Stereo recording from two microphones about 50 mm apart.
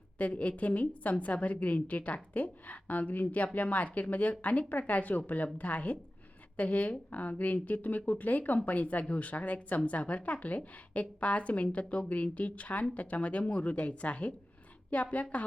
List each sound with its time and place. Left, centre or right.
0.2 s a woman's voice: left